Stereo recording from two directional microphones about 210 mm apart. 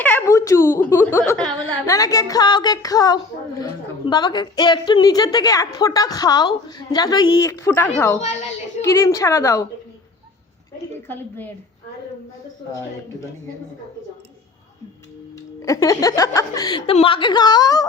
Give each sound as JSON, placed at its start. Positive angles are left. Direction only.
{"t": 0.0, "sound": "a woman's voice", "side_deg": 10}
{"t": 8.2, "sound": "a woman's voice", "side_deg": 30}
{"t": 8.8, "sound": "a woman's voice", "side_deg": 15}
{"t": 11.1, "sound": "a woman's voice", "side_deg": 10}
{"t": 15.6, "sound": "a woman's voice", "side_deg": 15}